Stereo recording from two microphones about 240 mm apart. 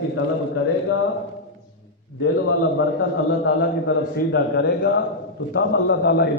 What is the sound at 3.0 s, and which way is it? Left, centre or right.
A man's voice, left.